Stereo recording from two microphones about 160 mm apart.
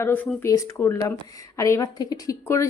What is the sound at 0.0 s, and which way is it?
Speech, 10° left (ahead or behind).